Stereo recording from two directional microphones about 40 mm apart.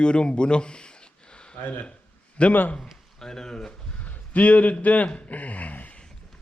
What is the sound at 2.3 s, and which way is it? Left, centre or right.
Speech, left.